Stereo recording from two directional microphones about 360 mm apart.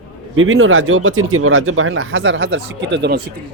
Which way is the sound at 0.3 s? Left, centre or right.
Right.